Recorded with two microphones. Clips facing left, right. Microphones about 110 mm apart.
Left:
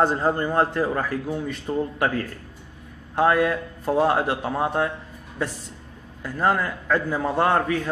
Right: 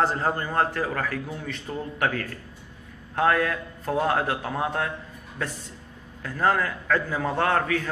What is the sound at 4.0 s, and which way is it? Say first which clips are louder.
Speech: left 4 dB; 10° left (ahead or behind).